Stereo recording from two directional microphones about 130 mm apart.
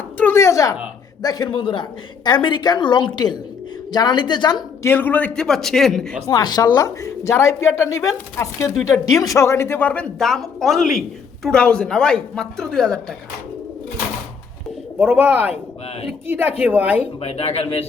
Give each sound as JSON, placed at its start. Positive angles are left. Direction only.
{"t": 0.2, "sound": "a sound", "side_deg": 20}
{"t": 1.2, "sound": "a woman's voice", "side_deg": 30}
{"t": 4.8, "sound": "a woman's voice", "side_deg": 15}
{"t": 6.2, "sound": "a woman's voice", "side_deg": 30}
{"t": 14.9, "sound": "a woman's voice", "side_deg": -15}
{"t": 17.2, "sound": "speech", "side_deg": 50}